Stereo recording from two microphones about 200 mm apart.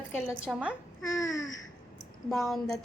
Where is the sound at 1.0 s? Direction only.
15° left (ahead or behind).